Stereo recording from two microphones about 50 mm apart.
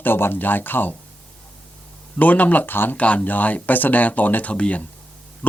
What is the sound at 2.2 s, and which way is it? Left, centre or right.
Speech, left.